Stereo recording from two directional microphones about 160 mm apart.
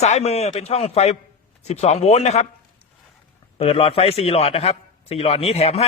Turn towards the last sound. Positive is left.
turn(degrees=40)  # may be behind; listen again after turning